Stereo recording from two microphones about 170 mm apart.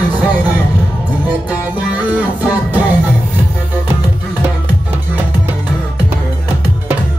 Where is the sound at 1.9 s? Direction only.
10° right (ahead or behind).